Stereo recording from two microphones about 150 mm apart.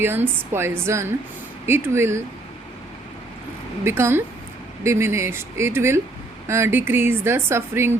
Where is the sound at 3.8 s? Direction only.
15° right (ahead or behind).